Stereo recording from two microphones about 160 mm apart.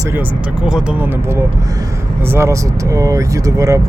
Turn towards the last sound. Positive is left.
turn(degrees=-20)  # may be behind; listen again after turning